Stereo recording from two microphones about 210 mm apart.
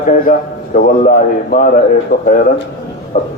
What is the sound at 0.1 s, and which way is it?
A man's voice, 40° left (ahead or behind).